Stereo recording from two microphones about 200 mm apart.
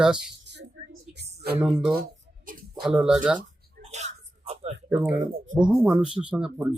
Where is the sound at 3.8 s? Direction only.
35° right (ahead or behind).